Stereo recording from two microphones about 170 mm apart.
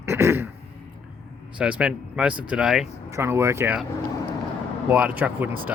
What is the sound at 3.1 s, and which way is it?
Speech, 15° right (ahead or behind).